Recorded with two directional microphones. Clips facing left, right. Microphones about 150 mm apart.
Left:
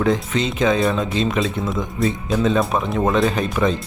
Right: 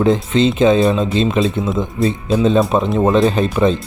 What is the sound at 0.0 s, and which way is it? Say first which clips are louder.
Speech: right 6 dB; 25° right (ahead or behind).